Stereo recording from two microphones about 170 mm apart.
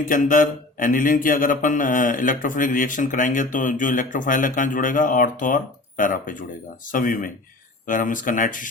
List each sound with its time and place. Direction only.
0.0 s a man's voice: 50° left (ahead or behind)